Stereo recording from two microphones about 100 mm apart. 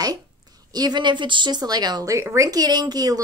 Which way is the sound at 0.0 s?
40° right (ahead or behind).